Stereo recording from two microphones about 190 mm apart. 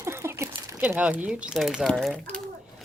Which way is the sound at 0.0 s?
15° right (ahead or behind).